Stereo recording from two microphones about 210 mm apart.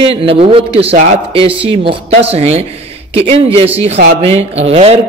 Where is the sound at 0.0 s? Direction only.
25° right (ahead or behind).